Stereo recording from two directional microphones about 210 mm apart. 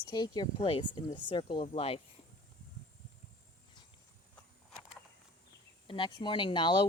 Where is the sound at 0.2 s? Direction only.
20° left (ahead or behind).